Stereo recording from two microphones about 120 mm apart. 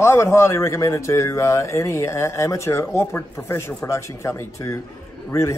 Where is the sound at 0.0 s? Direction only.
20° left (ahead or behind).